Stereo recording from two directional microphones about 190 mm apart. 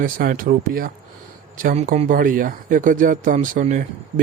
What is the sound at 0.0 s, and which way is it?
Speech, 45° right (ahead or behind).